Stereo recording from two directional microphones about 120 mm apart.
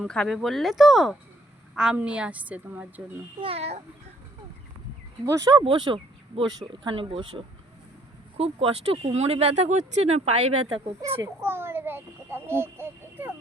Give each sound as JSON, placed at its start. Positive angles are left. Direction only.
{"t": 0.0, "sound": "a woman's voice", "side_deg": 5}
{"t": 3.4, "sound": "speech", "side_deg": -55}
{"t": 5.2, "sound": "a child's voice", "side_deg": -25}
{"t": 5.5, "sound": "speech", "side_deg": -40}
{"t": 11.2, "sound": "a child's voice", "side_deg": -20}